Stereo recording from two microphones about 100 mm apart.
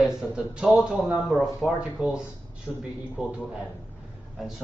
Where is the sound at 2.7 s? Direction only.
20° left (ahead or behind).